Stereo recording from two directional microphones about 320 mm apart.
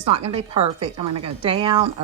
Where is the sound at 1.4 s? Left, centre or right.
Centre.